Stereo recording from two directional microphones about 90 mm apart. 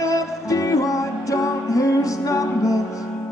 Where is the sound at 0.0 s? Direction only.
40° left (ahead or behind).